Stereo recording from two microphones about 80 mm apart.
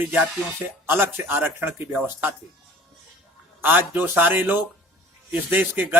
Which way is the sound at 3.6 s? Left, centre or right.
Right.